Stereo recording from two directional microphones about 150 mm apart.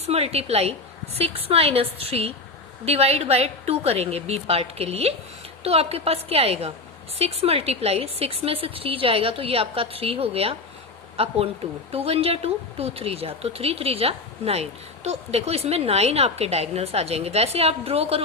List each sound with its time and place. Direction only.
0.1 s a woman's voice: 45° right (ahead or behind)